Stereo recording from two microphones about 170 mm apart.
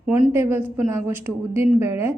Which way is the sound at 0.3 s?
15° right (ahead or behind).